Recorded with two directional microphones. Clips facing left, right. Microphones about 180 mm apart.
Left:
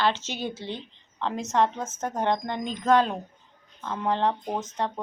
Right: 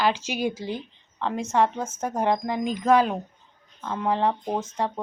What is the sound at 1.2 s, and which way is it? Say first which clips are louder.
A woman's voice: right 2 dB; centre (ahead or behind).